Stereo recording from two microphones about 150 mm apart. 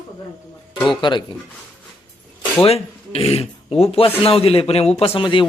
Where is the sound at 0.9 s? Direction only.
30° left (ahead or behind).